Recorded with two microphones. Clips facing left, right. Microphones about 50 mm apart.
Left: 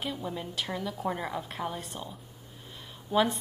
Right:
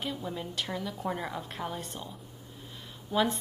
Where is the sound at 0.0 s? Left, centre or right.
Centre.